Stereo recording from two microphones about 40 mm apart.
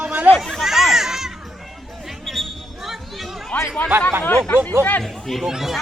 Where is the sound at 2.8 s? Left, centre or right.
Centre.